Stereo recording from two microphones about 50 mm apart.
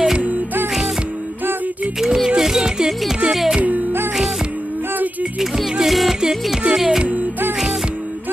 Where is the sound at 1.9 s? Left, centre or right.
Centre.